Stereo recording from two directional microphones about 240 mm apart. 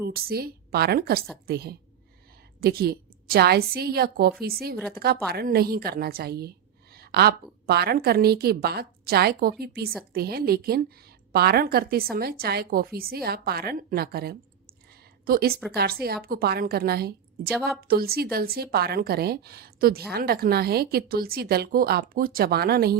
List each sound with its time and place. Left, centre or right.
0.1 s a woman's voice: right